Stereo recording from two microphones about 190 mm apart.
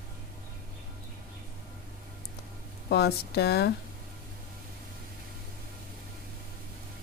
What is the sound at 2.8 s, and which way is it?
Speech, 60° left (ahead or behind).